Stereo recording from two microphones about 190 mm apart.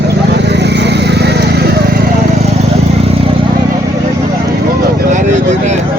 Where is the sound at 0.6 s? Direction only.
65° right (ahead or behind).